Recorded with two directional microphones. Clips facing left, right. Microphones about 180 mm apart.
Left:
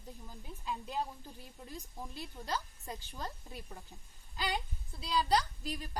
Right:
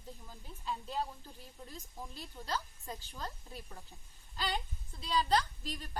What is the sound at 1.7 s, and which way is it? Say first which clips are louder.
A woman's voice: left 3 dB; 15° left (ahead or behind).